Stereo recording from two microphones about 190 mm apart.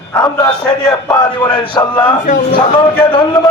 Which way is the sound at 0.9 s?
20° left (ahead or behind).